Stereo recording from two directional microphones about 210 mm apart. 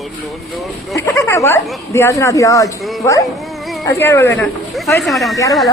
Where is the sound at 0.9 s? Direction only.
15° left (ahead or behind).